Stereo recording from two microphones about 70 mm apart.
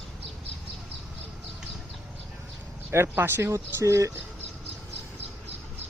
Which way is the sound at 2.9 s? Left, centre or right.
Right.